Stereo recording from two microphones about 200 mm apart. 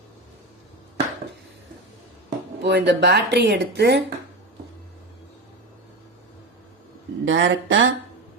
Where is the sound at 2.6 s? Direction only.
55° right (ahead or behind).